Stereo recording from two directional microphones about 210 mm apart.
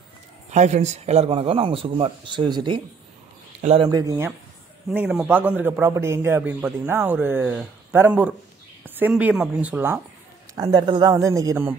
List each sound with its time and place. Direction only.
0.5 s a man's voice: 35° right (ahead or behind); by 4.3 s 15° right (ahead or behind)
4.9 s speech: 5° right (ahead or behind)